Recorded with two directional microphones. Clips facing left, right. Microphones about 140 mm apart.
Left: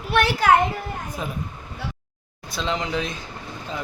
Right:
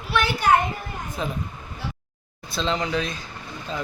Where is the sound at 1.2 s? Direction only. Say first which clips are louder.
Right 4 dB; 10° left (ahead or behind).